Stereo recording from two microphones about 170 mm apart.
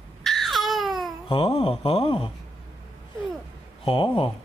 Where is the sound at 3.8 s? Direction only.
30° left (ahead or behind).